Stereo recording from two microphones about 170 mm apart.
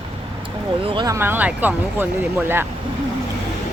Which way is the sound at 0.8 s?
30° right (ahead or behind).